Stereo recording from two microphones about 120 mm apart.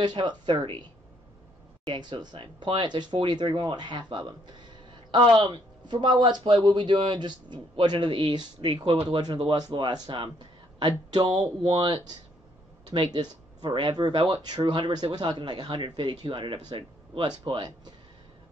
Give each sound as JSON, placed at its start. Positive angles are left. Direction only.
{"t": 0.0, "sound": "speech", "side_deg": -40}
{"t": 1.9, "sound": "speech", "side_deg": -40}
{"t": 9.4, "sound": "speech", "side_deg": -50}